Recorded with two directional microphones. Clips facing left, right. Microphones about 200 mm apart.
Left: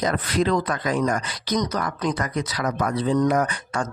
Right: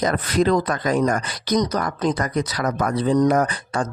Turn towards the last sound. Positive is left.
turn(degrees=-35)  # may be behind; listen again after turning